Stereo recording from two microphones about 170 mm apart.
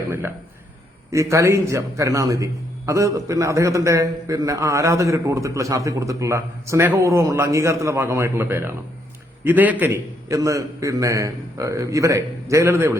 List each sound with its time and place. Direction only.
1.1 s a man's voice: 15° right (ahead or behind)